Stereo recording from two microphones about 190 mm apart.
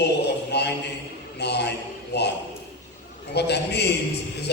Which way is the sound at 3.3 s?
60° left (ahead or behind).